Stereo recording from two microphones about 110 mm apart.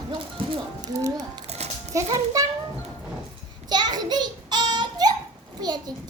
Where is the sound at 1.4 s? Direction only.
75° right (ahead or behind).